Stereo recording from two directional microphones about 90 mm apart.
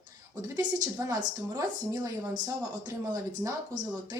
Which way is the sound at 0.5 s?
50° right (ahead or behind).